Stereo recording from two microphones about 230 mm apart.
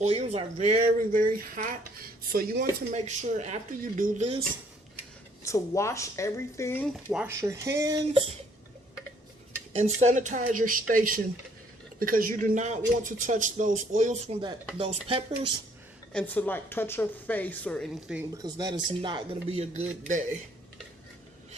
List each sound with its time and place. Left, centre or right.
0.0 s a man's voice: right
5.4 s speech: centre
9.7 s a man's voice: right
16.1 s speech: centre
18.4 s speech: centre; by 20.4 s right